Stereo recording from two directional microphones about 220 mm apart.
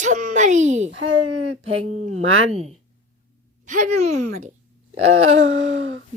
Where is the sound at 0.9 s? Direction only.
60° right (ahead or behind).